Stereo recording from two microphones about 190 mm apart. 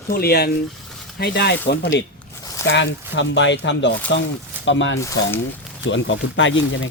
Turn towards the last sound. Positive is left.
turn(degrees=80)